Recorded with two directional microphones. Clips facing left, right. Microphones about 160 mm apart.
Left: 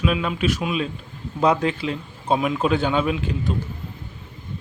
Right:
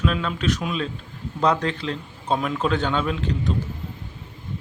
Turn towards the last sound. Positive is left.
turn(degrees=10)  # may be behind; listen again after turning